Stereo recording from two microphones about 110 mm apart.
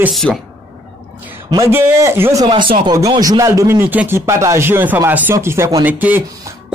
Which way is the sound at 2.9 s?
35° right (ahead or behind).